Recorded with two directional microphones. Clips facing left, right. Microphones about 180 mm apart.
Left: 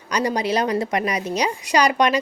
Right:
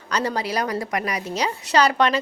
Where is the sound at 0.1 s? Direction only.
15° left (ahead or behind).